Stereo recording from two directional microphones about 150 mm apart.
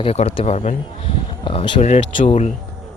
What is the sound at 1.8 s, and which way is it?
Speech, 45° left (ahead or behind).